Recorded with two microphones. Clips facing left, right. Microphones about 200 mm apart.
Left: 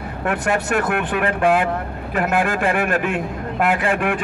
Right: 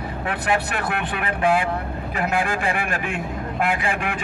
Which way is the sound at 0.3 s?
50° left (ahead or behind).